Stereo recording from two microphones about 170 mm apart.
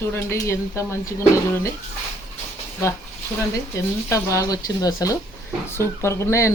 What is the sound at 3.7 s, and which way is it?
Speech, 20° left (ahead or behind).